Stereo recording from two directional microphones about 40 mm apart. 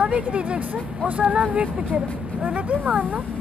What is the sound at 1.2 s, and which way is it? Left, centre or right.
Speech, right.